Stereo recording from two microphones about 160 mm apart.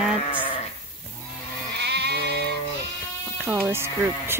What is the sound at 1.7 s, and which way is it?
Sheep, 90° right.